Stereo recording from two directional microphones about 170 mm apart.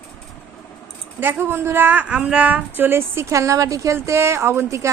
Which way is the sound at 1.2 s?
10° right (ahead or behind).